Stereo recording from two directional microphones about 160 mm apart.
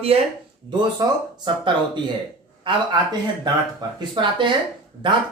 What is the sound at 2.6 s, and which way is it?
Speech, 30° right (ahead or behind).